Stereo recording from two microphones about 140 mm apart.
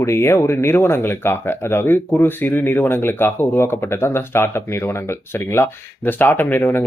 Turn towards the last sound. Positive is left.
turn(degrees=15)  # may be behind; listen again after turning